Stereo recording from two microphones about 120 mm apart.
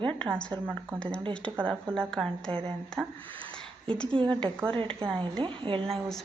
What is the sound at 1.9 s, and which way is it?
Speech, 5° left (ahead or behind).